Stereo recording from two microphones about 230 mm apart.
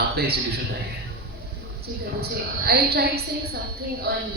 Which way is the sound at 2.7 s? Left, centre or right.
Right.